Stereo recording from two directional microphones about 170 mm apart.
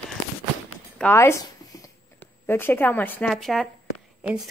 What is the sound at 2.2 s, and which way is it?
Speech, 15° left (ahead or behind).